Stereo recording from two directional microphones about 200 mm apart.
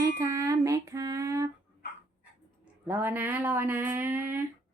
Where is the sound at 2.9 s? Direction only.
10° right (ahead or behind).